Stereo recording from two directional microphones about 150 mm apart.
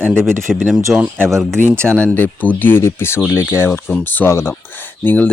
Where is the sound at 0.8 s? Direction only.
15° right (ahead or behind).